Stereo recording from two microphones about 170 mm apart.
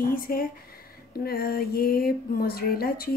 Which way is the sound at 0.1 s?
60° left (ahead or behind).